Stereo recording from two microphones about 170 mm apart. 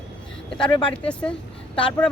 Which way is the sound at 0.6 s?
30° left (ahead or behind).